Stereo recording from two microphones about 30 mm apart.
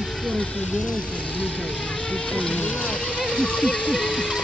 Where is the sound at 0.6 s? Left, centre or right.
Left.